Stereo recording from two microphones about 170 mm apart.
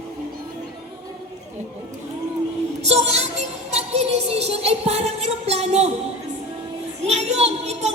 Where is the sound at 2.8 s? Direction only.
40° right (ahead or behind).